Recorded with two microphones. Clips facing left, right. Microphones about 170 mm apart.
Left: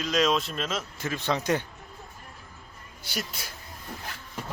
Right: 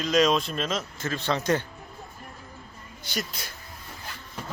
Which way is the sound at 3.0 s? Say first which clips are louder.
Right 2 dB; 5° left (ahead or behind).